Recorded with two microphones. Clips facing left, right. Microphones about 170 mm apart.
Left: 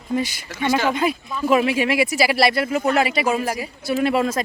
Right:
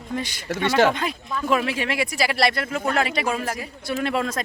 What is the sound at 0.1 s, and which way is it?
Speech, 5° left (ahead or behind).